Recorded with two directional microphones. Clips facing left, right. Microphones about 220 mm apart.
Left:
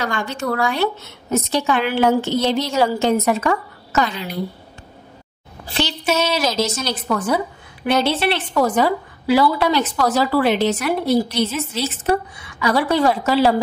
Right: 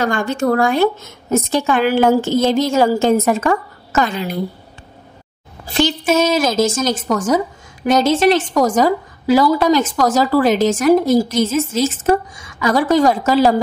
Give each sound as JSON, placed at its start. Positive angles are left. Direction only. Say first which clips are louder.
{"t": 0.0, "sound": "a woman's voice", "louder": "right 6 dB", "side_deg": -50}
{"t": 5.8, "sound": "a woman's voice", "louder": "right 6 dB", "side_deg": -50}